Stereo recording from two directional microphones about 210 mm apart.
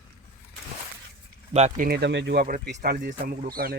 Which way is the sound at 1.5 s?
30° right (ahead or behind).